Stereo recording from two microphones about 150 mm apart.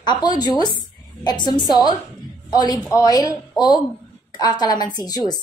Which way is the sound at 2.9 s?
25° left (ahead or behind).